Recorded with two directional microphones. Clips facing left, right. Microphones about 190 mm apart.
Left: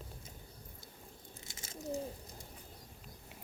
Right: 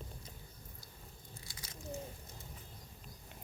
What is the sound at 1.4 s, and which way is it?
Bird, 25° left (ahead or behind).